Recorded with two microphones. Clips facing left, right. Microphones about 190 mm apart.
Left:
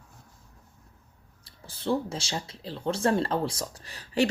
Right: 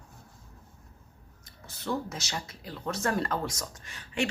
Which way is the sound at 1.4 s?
30° left (ahead or behind).